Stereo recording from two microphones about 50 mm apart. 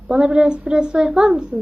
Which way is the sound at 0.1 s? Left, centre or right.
Centre.